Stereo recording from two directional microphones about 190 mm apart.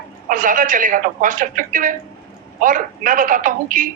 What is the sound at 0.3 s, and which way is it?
A man's voice, 45° right (ahead or behind).